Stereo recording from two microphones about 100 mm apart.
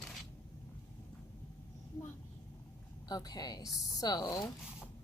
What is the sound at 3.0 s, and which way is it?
Speech, 40° left (ahead or behind).